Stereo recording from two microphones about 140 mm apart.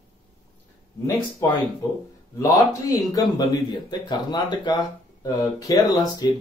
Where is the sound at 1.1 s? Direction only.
20° left (ahead or behind).